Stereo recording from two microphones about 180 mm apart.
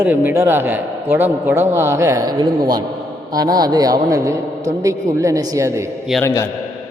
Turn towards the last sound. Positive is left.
turn(degrees=15)  # may be behind; listen again after turning